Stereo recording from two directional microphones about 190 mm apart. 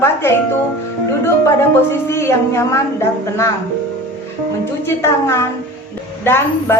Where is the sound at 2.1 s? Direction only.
15° left (ahead or behind).